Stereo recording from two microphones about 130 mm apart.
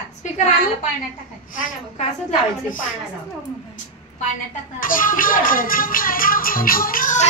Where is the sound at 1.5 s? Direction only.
90° left.